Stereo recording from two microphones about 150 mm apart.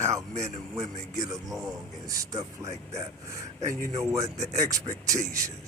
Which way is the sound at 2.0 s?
20° right (ahead or behind).